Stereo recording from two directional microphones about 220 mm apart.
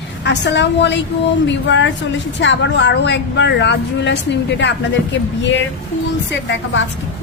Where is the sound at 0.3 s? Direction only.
50° left (ahead or behind).